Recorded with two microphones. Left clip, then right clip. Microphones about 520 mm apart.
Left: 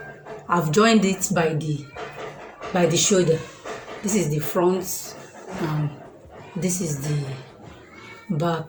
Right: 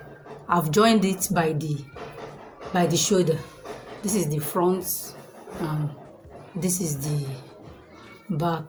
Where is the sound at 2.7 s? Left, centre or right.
Right.